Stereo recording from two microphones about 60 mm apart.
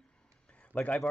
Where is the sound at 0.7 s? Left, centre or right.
Centre.